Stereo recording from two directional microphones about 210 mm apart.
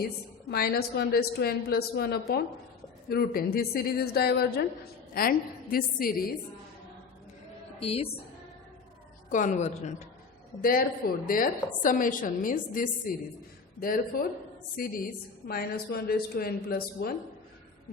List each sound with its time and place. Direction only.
0.4 s a woman's voice: 50° left (ahead or behind)
7.8 s a woman's voice: 30° left (ahead or behind)
9.3 s a woman's voice: 35° left (ahead or behind)
10.6 s a woman's voice: 45° left (ahead or behind)